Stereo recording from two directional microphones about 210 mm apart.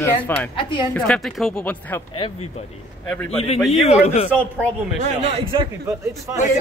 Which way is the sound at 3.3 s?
30° left (ahead or behind).